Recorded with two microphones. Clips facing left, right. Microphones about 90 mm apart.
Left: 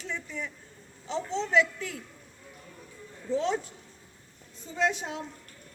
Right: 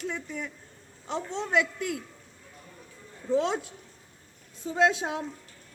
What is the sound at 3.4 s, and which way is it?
Speech, 60° right (ahead or behind).